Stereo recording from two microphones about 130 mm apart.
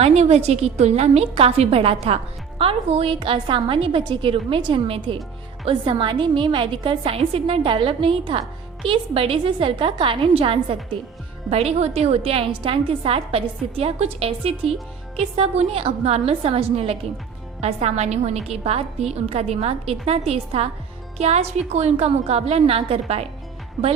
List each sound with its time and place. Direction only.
0.0 s a woman's voice: 55° right (ahead or behind)
11.5 s a woman's voice: 55° right (ahead or behind)